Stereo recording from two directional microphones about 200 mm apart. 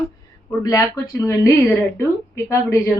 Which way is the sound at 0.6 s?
15° left (ahead or behind).